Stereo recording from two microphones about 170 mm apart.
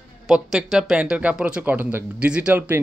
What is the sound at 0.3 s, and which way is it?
Speech, centre (ahead or behind).